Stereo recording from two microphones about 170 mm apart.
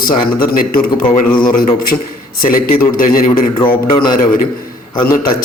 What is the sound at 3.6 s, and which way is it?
Speech, 30° left (ahead or behind).